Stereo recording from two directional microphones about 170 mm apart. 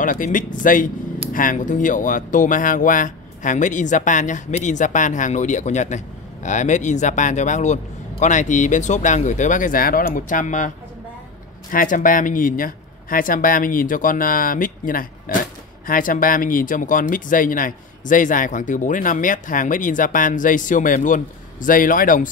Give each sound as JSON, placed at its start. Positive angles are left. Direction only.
{"t": 0.0, "sound": "speech", "side_deg": 50}
{"t": 11.7, "sound": "speech", "side_deg": 55}